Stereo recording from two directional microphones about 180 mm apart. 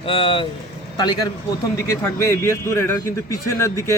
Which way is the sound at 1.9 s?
15° left (ahead or behind).